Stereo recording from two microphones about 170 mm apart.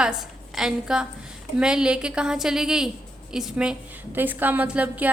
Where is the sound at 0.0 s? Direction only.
5° right (ahead or behind).